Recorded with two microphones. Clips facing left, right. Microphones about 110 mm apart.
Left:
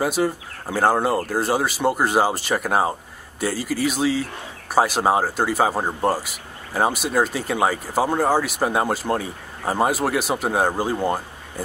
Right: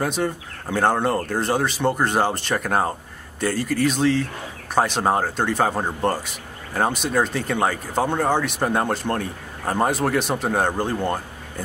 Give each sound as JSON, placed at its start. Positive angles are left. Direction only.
{"t": 0.0, "sound": "speech", "side_deg": 5}